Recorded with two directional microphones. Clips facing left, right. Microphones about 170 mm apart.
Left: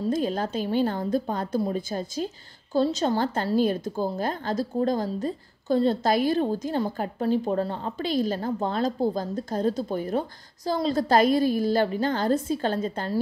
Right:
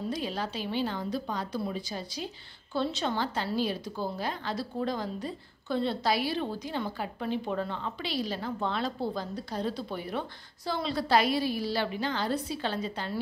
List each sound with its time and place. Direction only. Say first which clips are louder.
0.0 s a woman's voice: left 7 dB; 45° left (ahead or behind)